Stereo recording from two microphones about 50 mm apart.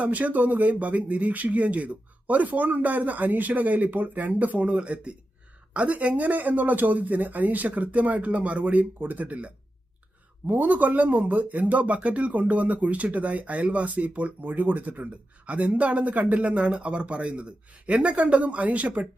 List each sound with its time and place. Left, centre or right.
0.0 s speech: right